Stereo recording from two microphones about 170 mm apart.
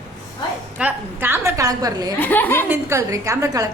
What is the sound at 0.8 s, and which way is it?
A woman's voice, 10° right (ahead or behind).